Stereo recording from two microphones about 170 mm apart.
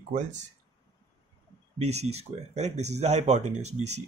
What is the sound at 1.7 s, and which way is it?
Speech, 40° right (ahead or behind).